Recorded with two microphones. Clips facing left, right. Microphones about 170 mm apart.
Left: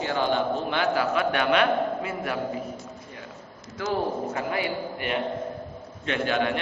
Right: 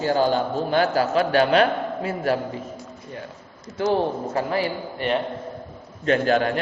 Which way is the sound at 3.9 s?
35° right (ahead or behind).